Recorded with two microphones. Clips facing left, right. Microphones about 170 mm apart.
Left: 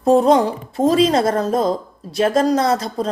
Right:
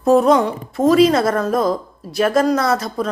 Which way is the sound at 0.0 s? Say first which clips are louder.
Even; 30° left (ahead or behind).